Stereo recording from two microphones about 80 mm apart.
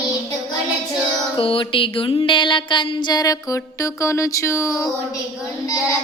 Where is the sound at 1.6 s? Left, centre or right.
Left.